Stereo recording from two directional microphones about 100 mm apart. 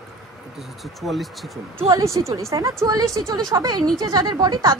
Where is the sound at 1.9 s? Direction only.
30° right (ahead or behind).